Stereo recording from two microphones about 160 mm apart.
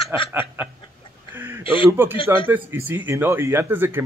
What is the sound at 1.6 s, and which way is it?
Speech, 35° left (ahead or behind).